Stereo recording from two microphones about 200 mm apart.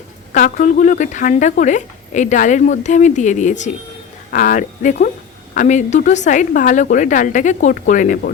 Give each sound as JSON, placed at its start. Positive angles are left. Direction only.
{"t": 0.3, "sound": "a woman's voice", "side_deg": 40}